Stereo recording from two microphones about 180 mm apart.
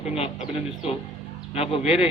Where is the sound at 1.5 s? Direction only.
35° left (ahead or behind).